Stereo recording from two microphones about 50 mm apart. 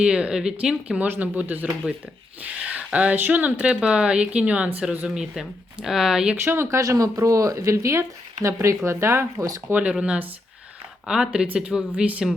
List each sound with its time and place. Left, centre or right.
0.0 s speech: right
1.2 s speech: right
3.6 s speech: right
5.0 s speech: centre
6.3 s speech: right
6.7 s speech: right
9.7 s speech: right
11.0 s speech: centre